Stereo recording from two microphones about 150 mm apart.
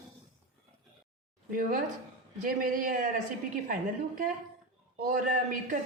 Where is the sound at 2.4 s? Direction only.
65° right (ahead or behind).